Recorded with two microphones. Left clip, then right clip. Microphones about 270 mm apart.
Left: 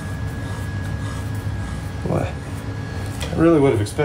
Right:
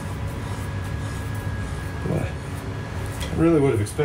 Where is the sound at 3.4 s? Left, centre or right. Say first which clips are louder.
Left 4 dB; left.